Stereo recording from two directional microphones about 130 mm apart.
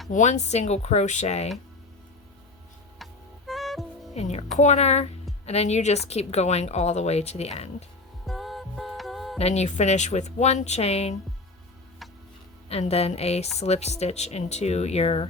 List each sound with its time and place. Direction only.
0.1 s speech: 65° left (ahead or behind)
3.0 s music: centre (ahead or behind)
4.1 s speech: 55° left (ahead or behind)
8.3 s music: centre (ahead or behind)
9.4 s speech: 55° left (ahead or behind)
12.6 s a woman's voice: 50° left (ahead or behind)